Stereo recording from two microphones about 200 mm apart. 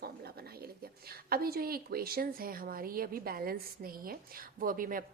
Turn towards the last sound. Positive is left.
turn(degrees=-45)  # may be behind; listen again after turning